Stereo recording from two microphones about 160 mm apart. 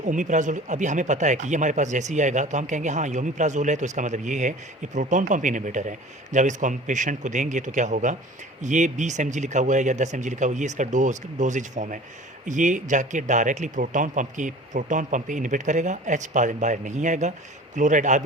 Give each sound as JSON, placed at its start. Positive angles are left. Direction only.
{"t": 0.0, "sound": "speech", "side_deg": -50}